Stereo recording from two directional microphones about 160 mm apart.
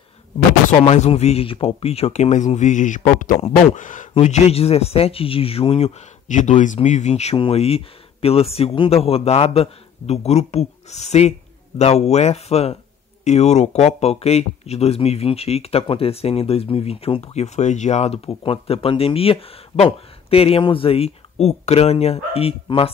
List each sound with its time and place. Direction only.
0.7 s speech: 40° left (ahead or behind)
4.1 s speech: 40° left (ahead or behind)